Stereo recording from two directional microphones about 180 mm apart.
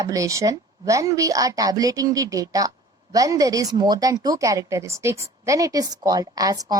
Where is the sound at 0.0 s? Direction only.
20° right (ahead or behind).